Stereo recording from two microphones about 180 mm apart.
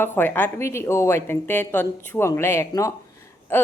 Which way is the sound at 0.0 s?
10° left (ahead or behind).